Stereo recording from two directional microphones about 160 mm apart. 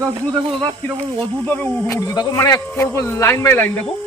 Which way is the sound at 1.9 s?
20° left (ahead or behind).